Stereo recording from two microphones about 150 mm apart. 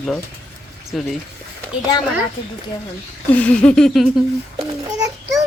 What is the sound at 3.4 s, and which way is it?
Speech, 10° left (ahead or behind).